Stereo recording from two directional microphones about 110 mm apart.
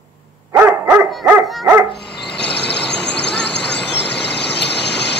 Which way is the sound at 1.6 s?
30° right (ahead or behind).